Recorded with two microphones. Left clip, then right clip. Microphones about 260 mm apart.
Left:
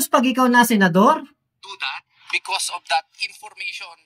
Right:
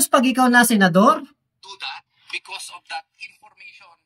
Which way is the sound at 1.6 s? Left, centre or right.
Centre.